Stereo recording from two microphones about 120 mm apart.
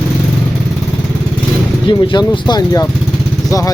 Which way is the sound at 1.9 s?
40° left (ahead or behind).